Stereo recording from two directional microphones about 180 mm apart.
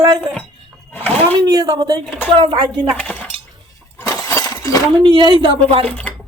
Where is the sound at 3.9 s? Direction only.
15° left (ahead or behind).